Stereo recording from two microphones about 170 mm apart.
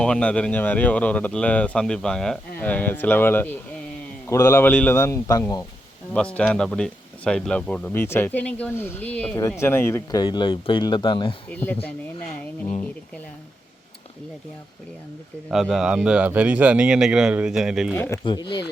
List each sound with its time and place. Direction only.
0.0 s speech: 5° left (ahead or behind)
6.1 s speech: 5° left (ahead or behind); by 11.3 s 30° left (ahead or behind)
11.5 s speech: 10° left (ahead or behind)
15.4 s speech: centre (ahead or behind)
17.9 s speech: 10° left (ahead or behind)
18.2 s speech: 25° left (ahead or behind)